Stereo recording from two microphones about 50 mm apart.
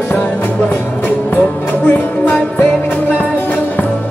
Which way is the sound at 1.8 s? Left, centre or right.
Left.